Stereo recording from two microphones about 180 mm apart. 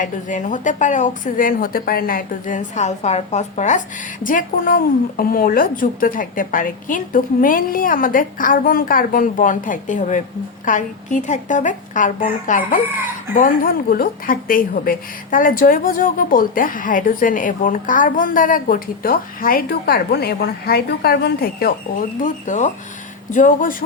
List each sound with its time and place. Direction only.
0.0 s a woman's voice: 45° left (ahead or behind)
22.2 s a woman's voice: 45° left (ahead or behind)